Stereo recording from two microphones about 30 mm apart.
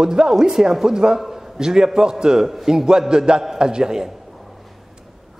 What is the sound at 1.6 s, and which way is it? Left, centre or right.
Speech, right.